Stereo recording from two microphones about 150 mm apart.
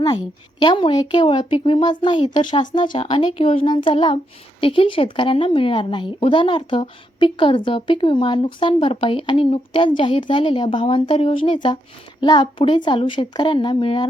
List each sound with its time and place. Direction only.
0.6 s a woman's voice: 30° left (ahead or behind)